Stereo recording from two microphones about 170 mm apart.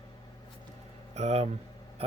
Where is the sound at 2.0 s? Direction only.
35° right (ahead or behind).